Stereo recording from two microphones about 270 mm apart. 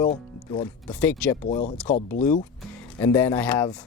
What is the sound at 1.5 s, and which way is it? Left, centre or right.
Speech, left.